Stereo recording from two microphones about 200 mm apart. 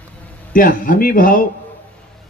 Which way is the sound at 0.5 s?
40° left (ahead or behind).